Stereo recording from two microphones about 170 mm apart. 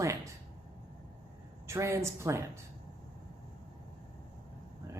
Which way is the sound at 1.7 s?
15° right (ahead or behind).